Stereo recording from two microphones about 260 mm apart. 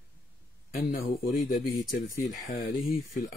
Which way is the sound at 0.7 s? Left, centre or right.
Left.